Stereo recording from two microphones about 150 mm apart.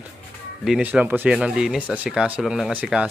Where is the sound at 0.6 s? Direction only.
5° right (ahead or behind).